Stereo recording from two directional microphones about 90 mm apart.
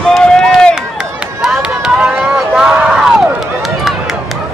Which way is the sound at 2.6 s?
10° right (ahead or behind).